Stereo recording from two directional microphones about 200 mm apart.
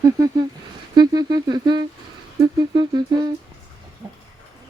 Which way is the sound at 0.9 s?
20° right (ahead or behind).